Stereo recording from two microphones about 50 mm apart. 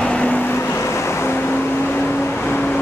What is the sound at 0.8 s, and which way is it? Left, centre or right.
Vehicle, left.